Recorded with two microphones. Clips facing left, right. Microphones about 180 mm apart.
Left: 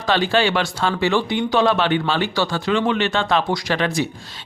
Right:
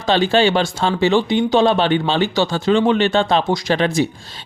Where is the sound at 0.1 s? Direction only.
25° right (ahead or behind).